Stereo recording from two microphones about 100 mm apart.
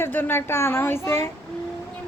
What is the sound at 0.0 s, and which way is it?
A woman's voice, 20° left (ahead or behind).